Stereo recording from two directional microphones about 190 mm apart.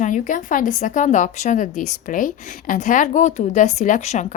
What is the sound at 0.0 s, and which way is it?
Speech, 45° left (ahead or behind).